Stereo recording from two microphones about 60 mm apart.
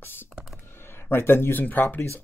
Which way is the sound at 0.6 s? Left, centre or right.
Left.